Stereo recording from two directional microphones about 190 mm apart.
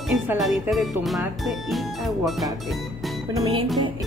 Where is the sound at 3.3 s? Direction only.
20° right (ahead or behind).